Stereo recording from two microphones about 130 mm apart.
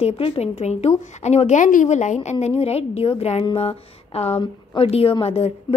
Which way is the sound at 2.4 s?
50° left (ahead or behind).